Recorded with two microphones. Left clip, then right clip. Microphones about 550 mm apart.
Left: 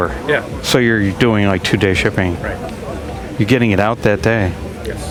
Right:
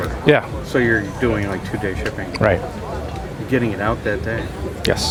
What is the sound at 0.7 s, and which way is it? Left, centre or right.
Speech, left.